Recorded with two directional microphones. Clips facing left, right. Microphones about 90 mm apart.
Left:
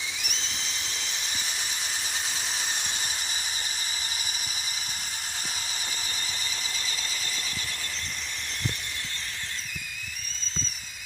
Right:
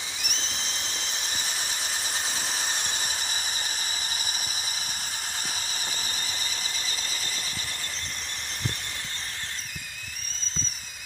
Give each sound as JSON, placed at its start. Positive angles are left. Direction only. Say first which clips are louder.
{"t": 0.2, "sound": "whistle", "louder": "right 1 dB", "side_deg": -55}
{"t": 0.9, "sound": "squeal", "louder": "right 1 dB", "side_deg": -35}
{"t": 2.8, "sound": "squeal", "louder": "right 1 dB", "side_deg": -5}